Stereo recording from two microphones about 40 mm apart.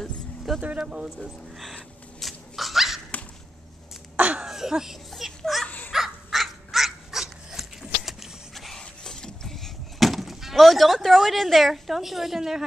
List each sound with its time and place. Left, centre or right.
0.6 s speech: right
0.8 s speech: centre
1.2 s speech: centre
2.1 s dog: centre
4.2 s a sound: right
4.5 s throat clearing: centre
5.4 s dog: centre
5.9 s dog: centre
9.0 s vehicle: centre